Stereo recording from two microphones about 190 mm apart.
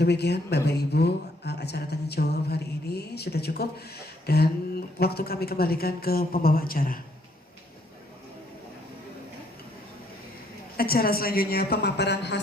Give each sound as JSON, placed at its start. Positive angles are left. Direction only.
{"t": 0.0, "sound": "speech", "side_deg": 60}
{"t": 10.8, "sound": "a woman's voice", "side_deg": 50}